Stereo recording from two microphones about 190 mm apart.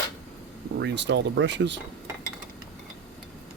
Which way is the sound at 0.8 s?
70° right (ahead or behind).